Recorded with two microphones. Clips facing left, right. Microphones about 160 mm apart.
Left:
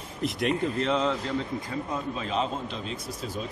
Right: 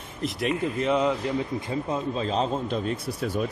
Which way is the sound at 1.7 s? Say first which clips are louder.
Right 5 dB; 30° right (ahead or behind).